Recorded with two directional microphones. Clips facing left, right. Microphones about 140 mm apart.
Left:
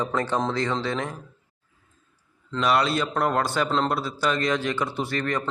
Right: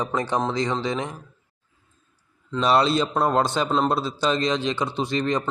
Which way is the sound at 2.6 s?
25° right (ahead or behind).